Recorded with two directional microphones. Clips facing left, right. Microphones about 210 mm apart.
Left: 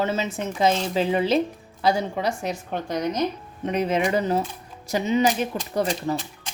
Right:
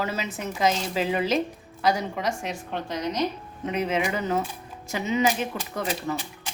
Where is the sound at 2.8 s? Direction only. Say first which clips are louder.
Left 4 dB; 50° left (ahead or behind).